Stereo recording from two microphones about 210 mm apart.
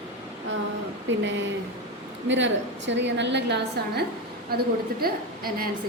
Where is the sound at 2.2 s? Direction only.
60° right (ahead or behind); by 5.6 s 45° right (ahead or behind).